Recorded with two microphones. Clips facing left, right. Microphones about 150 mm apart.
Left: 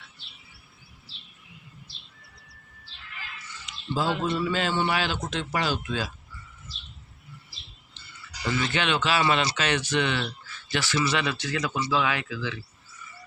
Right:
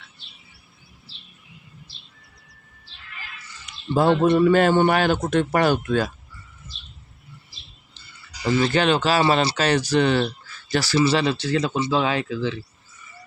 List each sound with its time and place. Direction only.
3.7 s a man's voice: 60° right (ahead or behind)
8.0 s a sound: 35° right (ahead or behind)
8.4 s speech: 35° right (ahead or behind)